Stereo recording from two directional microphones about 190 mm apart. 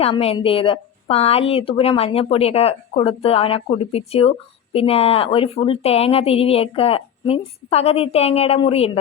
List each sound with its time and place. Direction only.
0.0 s a woman's voice: 30° left (ahead or behind)